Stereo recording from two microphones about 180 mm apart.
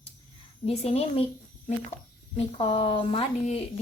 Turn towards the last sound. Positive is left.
turn(degrees=35)  # may be behind; listen again after turning